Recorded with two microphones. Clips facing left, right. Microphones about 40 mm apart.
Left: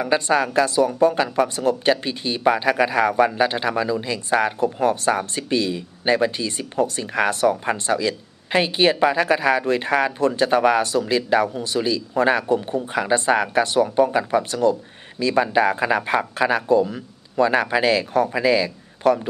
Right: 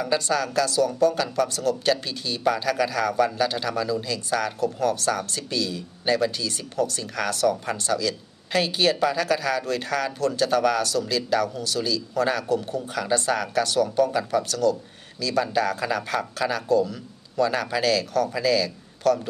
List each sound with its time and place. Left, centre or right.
0.0 s speech: left